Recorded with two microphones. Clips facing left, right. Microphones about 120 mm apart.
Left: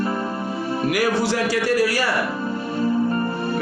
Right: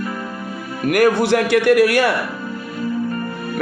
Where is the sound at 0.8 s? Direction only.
55° right (ahead or behind).